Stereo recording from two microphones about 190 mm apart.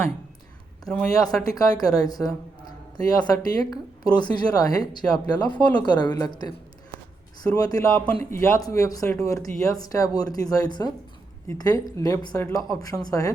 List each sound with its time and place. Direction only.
0.9 s speech: 5° left (ahead or behind)
1.5 s speech: 20° left (ahead or behind)
7.4 s speech: 20° left (ahead or behind)